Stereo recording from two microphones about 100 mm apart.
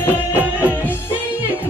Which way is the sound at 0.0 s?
20° left (ahead or behind).